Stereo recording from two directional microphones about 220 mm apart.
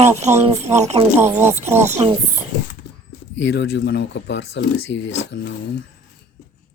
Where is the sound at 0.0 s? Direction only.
30° right (ahead or behind).